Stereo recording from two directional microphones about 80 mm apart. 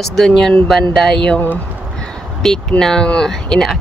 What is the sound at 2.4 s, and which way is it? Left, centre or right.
Speech, centre.